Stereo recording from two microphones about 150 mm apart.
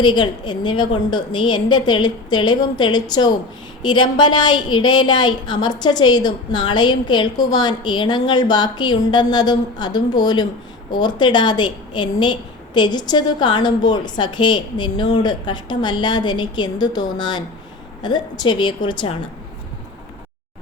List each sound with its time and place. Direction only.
0.0 s a woman's voice: 30° left (ahead or behind)